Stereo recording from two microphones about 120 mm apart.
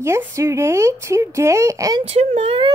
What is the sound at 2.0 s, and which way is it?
Speech, 60° right (ahead or behind).